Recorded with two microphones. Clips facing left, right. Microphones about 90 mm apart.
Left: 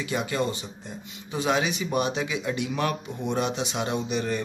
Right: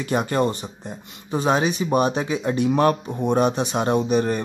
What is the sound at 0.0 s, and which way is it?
Speech, 45° right (ahead or behind).